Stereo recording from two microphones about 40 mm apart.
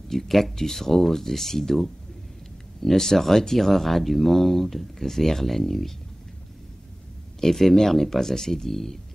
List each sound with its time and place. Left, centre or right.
0.1 s speech: centre
7.3 s speech: centre